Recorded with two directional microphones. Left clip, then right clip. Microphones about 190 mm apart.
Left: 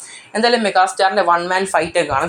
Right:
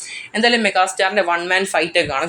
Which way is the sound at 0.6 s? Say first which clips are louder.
Left 2 dB; 15° right (ahead or behind).